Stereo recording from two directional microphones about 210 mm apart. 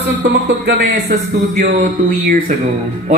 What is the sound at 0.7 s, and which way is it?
A man's voice, 40° right (ahead or behind).